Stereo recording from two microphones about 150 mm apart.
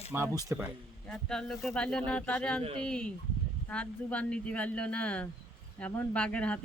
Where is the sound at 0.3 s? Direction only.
20° right (ahead or behind).